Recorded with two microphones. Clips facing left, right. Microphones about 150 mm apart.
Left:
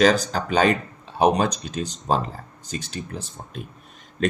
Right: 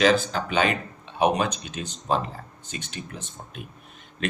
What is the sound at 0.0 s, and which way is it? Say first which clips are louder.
Speech: left 2 dB; 40° left (ahead or behind).